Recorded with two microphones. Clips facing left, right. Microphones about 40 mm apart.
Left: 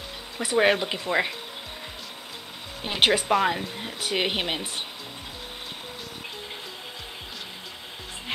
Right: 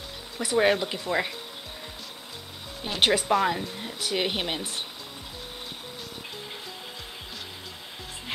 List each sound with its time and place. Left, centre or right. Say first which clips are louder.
0.4 s speech: left 1 dB; left
2.8 s speech: left 2 dB; left